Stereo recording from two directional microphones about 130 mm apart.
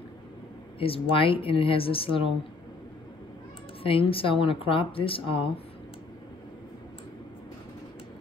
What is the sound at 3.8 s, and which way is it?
Speech, 45° left (ahead or behind).